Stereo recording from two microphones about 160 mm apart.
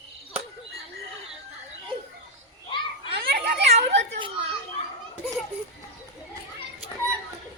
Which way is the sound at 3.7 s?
45° right (ahead or behind).